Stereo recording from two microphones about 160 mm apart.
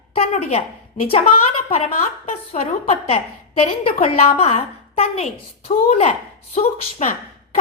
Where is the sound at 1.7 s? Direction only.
40° left (ahead or behind).